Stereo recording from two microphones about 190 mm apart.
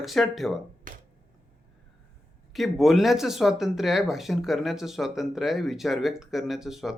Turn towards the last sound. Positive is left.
turn(degrees=0)  # may be behind; listen again after turning